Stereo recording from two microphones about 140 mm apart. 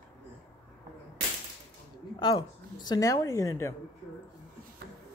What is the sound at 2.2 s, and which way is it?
A woman's voice, 35° left (ahead or behind).